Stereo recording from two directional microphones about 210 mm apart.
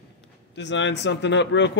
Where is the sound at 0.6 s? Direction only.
60° left (ahead or behind).